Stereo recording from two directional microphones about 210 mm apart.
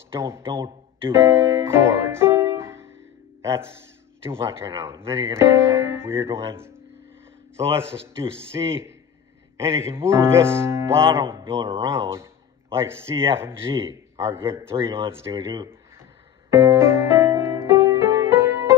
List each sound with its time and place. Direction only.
0.2 s speech: 15° right (ahead or behind)
4.3 s speech: 10° right (ahead or behind)
8.5 s speech: 20° right (ahead or behind)
16.4 s music: 15° right (ahead or behind)